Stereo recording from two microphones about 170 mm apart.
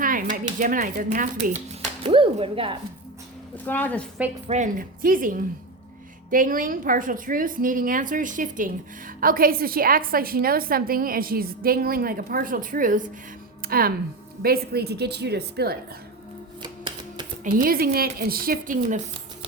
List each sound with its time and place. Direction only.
0.0 s a sound: 55° right (ahead or behind)
0.6 s speech: 50° right (ahead or behind)
2.0 s speech: 30° right (ahead or behind)
3.7 s a woman's voice: 10° left (ahead or behind)
4.4 s a woman's voice: 45° right (ahead or behind); by 15.8 s 70° right (ahead or behind)
16.6 s typewriter: 25° right (ahead or behind)
17.4 s a woman's voice: 60° right (ahead or behind)